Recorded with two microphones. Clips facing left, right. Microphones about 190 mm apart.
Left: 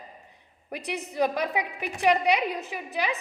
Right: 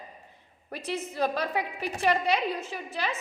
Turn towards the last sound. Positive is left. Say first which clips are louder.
# left 3 dB
turn(degrees=15)  # may be behind; listen again after turning